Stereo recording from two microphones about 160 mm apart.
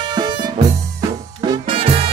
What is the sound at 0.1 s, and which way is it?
Music, 25° right (ahead or behind).